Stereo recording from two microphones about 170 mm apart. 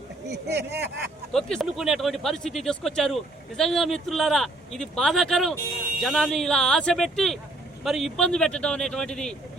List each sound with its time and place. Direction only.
0.3 s speech: 80° right
1.3 s speech: 5° left (ahead or behind)